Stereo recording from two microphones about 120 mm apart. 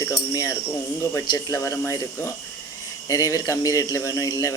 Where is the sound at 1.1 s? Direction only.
25° left (ahead or behind).